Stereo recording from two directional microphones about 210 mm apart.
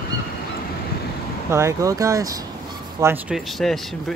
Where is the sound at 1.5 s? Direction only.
15° right (ahead or behind).